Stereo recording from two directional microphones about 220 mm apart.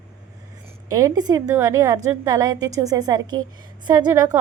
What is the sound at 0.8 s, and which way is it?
A woman's voice, 15° right (ahead or behind).